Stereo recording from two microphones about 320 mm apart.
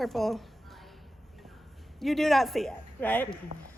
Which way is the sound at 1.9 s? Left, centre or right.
Centre.